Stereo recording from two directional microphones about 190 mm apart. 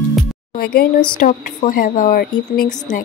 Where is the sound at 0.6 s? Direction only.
55° left (ahead or behind).